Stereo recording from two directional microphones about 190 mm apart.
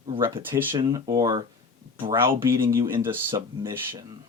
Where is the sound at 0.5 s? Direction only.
15° right (ahead or behind).